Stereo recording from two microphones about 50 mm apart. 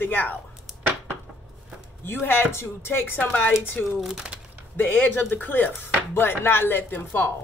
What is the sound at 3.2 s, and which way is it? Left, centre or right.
Speech, left.